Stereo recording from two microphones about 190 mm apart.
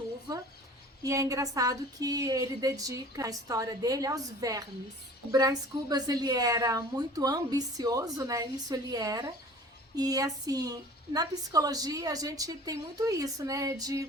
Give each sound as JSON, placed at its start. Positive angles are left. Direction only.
{"t": 1.0, "sound": "a woman's voice", "side_deg": -15}